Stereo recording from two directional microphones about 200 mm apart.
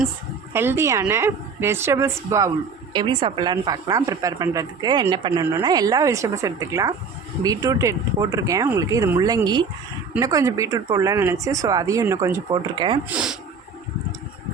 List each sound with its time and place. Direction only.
0.5 s speech: 10° right (ahead or behind)
13.1 s speech: 5° right (ahead or behind)